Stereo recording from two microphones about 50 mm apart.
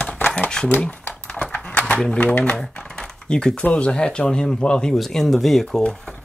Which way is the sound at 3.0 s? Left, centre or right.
Centre.